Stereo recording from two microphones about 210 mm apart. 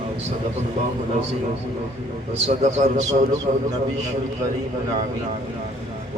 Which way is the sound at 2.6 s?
35° right (ahead or behind).